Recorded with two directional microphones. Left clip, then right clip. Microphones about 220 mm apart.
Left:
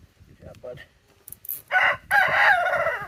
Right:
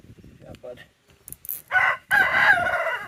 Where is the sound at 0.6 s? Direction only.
5° left (ahead or behind).